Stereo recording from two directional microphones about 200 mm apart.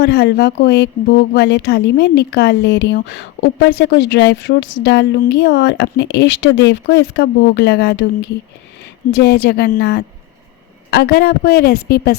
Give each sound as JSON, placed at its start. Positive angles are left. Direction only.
{"t": 0.0, "sound": "speech", "side_deg": 55}
{"t": 9.2, "sound": "a woman's voice", "side_deg": 55}